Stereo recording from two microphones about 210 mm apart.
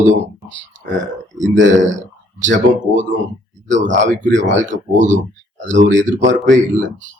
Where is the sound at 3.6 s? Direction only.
60° right (ahead or behind).